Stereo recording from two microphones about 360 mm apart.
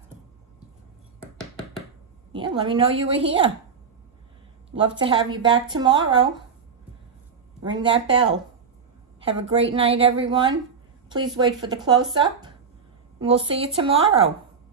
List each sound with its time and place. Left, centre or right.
1.2 s a sound: centre
2.3 s speech: centre
4.7 s speech: centre
7.6 s speech: centre